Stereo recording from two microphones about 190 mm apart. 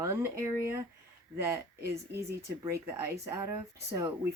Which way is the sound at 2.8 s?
15° right (ahead or behind).